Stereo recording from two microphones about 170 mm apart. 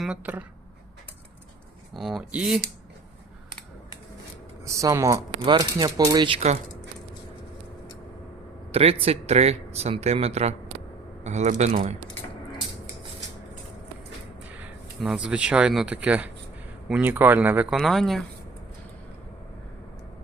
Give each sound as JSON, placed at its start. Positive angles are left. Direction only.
{"t": 0.0, "sound": "speech", "side_deg": -5}
{"t": 1.9, "sound": "speech", "side_deg": 0}
{"t": 4.6, "sound": "speech", "side_deg": -20}
{"t": 8.7, "sound": "speech", "side_deg": -35}
{"t": 15.0, "sound": "speech", "side_deg": -5}